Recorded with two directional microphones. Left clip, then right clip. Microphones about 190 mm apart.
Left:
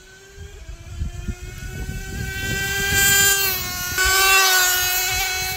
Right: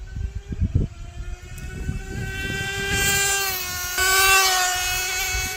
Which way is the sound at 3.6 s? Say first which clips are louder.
Left 2 dB; 15° right (ahead or behind).